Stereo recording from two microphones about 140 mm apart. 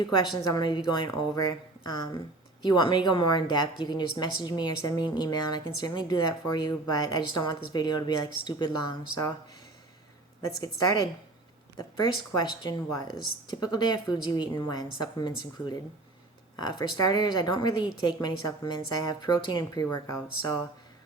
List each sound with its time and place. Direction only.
0.5 s a woman's voice: 35° left (ahead or behind)
10.4 s a woman's voice: 25° left (ahead or behind)